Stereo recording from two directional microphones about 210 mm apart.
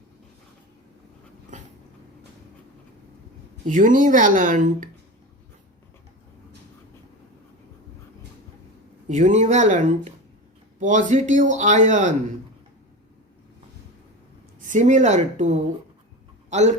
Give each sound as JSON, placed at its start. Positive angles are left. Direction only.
{"t": 3.7, "sound": "speech", "side_deg": -40}
{"t": 9.0, "sound": "speech", "side_deg": -35}
{"t": 14.6, "sound": "speech", "side_deg": -35}